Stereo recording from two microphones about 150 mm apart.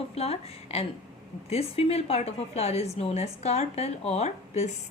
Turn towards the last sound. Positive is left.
turn(degrees=45)  # may be behind; listen again after turning